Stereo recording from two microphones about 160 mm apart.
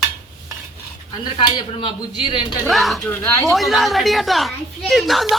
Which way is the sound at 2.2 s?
30° left (ahead or behind).